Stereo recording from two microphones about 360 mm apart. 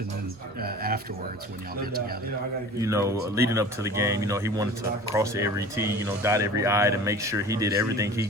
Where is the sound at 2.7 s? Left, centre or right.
Centre.